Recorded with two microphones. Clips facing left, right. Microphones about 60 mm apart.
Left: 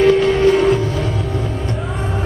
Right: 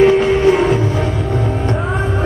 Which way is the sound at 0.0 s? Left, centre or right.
Centre.